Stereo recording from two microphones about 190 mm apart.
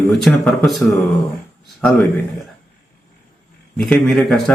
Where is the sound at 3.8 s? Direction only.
Centre (ahead or behind).